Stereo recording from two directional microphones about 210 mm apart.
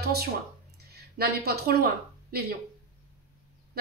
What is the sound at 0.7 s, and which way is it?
A woman's voice, 50° right (ahead or behind).